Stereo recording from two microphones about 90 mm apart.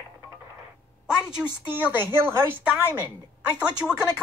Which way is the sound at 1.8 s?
25° right (ahead or behind).